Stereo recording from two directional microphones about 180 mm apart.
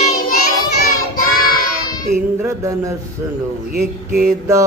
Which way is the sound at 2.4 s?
15° right (ahead or behind).